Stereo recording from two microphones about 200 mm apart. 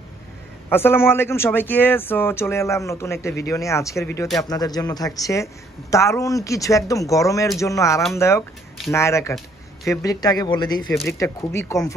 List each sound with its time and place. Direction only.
0.7 s speech: 10° left (ahead or behind)